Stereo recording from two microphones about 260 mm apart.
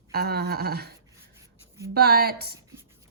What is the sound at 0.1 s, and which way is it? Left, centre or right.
A woman's voice, right.